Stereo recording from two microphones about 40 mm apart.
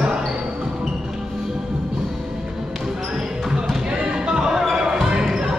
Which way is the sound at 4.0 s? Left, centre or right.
Right.